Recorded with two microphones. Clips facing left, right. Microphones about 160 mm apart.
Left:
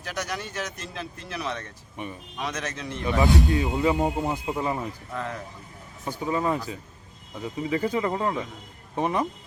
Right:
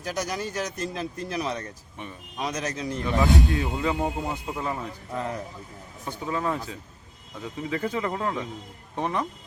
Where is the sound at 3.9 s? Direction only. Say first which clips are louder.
Left 3 dB; 15° left (ahead or behind).